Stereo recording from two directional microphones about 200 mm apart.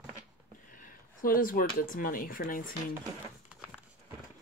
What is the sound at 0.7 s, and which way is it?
Speech, 40° left (ahead or behind).